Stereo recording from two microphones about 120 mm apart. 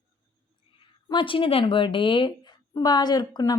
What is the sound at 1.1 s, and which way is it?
A woman's voice, 45° left (ahead or behind).